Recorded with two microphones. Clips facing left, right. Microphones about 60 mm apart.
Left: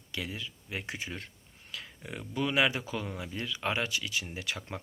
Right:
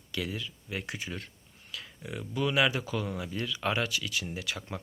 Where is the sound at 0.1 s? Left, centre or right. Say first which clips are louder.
Right 3 dB; left.